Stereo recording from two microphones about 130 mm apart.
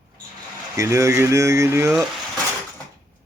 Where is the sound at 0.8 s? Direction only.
20° right (ahead or behind).